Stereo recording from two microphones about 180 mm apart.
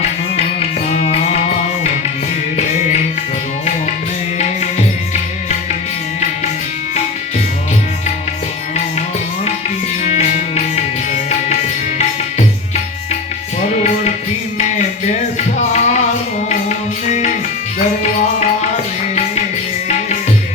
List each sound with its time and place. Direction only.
0.9 s music: 35° left (ahead or behind)
10.0 s music: 40° left (ahead or behind)
13.6 s music: 40° left (ahead or behind)